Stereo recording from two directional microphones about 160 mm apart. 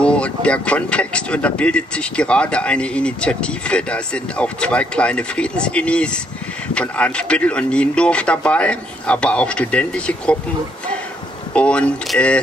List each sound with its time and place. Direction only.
0.0 s speech: 5° left (ahead or behind)
11.5 s speech: 5° left (ahead or behind)